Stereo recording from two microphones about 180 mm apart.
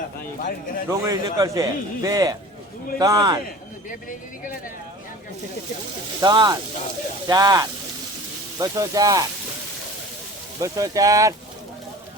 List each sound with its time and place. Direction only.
0.4 s speech: 50° left (ahead or behind)
0.9 s a man's voice: 20° right (ahead or behind)
6.1 s a man's voice: 25° right (ahead or behind)
10.6 s a man's voice: 20° right (ahead or behind)